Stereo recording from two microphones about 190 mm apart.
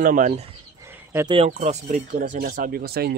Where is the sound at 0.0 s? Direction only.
45° right (ahead or behind).